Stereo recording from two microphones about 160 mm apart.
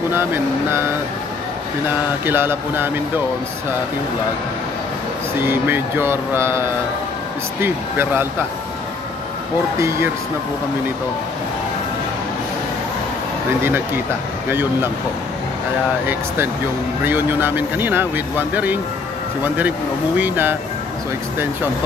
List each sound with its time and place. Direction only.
0.1 s speech: 15° right (ahead or behind)
1.9 s speech: 15° right (ahead or behind)
5.4 s speech: 15° right (ahead or behind)
7.6 s speech: 15° right (ahead or behind)
9.8 s speech: 20° right (ahead or behind)
13.5 s speech: 15° right (ahead or behind)
17.0 s speech: 10° right (ahead or behind)